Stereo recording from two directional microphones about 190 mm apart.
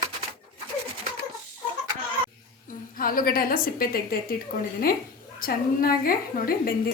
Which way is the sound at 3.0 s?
50° left (ahead or behind).